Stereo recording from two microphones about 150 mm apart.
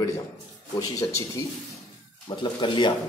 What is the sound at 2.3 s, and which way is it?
Speech, 30° left (ahead or behind).